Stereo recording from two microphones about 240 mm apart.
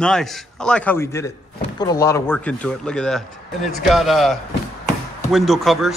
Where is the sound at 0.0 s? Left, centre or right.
Centre.